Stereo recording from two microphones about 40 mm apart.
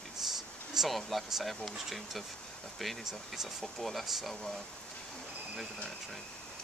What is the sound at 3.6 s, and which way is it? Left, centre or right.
Speech, centre.